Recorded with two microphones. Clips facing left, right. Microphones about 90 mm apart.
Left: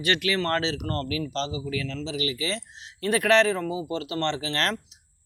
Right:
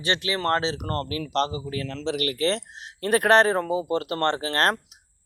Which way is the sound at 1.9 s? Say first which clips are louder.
Right 3 dB; 65° right (ahead or behind).